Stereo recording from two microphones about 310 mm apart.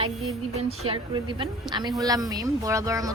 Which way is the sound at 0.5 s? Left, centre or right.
Centre.